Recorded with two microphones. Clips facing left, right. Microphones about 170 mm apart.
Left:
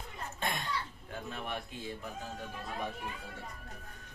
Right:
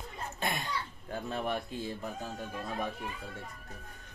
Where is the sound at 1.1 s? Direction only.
40° right (ahead or behind).